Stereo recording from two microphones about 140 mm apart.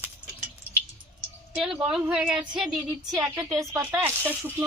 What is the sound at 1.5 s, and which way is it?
A woman's voice, 5° right (ahead or behind).